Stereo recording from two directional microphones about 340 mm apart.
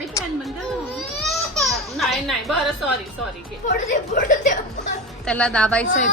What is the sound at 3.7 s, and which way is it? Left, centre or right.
Speech, left.